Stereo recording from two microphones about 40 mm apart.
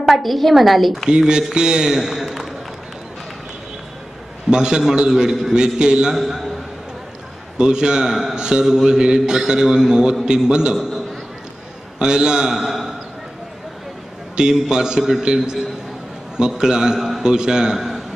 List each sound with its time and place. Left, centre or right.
0.0 s a woman's voice: centre
1.0 s a man's voice: centre
4.5 s a man's voice: centre
5.5 s a man's voice: right
7.5 s a man's voice: centre
8.4 s a man's voice: right
12.4 s a man's voice: centre
14.4 s a man's voice: centre
17.7 s a sound: centre